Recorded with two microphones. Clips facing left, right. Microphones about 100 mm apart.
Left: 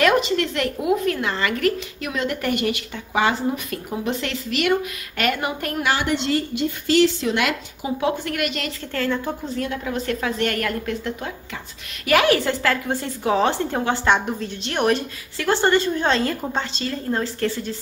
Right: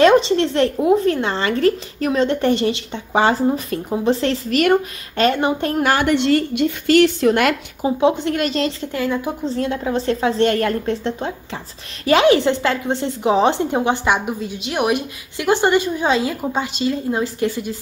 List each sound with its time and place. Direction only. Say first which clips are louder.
0.0 s a woman's voice: right 6 dB; 30° right (ahead or behind)
5.1 s speech: right 7 dB; 30° right (ahead or behind)
5.8 s a woman's voice: right 4 dB; 45° right (ahead or behind)
7.8 s speech: right 7 dB; 25° right (ahead or behind)
8.9 s a woman's voice: left 1 dB; 15° right (ahead or behind)
9.6 s a woman's voice: right 6 dB; 30° right (ahead or behind); by 17.7 s 15° right (ahead or behind)